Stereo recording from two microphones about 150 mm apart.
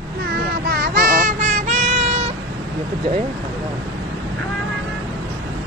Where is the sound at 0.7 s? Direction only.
85° right; by 2.3 s 45° right (ahead or behind).